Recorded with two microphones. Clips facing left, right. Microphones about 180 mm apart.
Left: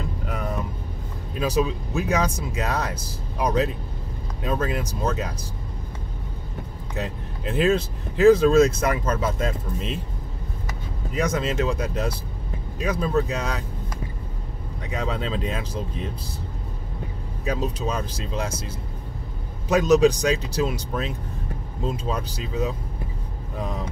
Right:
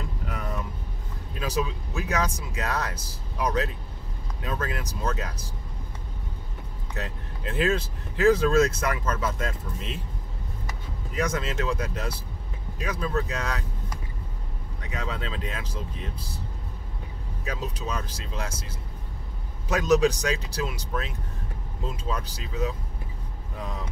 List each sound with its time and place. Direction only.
1.4 s speech: 20° left (ahead or behind)
7.0 s speech: 20° left (ahead or behind)
11.1 s speech: 20° left (ahead or behind)
14.9 s speech: 25° left (ahead or behind)
17.5 s speech: 20° left (ahead or behind)
19.7 s speech: 20° left (ahead or behind)